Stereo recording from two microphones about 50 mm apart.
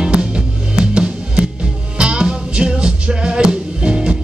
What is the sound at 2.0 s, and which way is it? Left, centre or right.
Music, centre.